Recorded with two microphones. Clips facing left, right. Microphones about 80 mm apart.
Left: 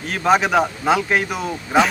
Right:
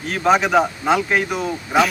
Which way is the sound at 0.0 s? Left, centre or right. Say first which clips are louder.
Even; centre.